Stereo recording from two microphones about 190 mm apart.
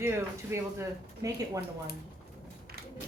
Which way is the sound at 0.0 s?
15° right (ahead or behind).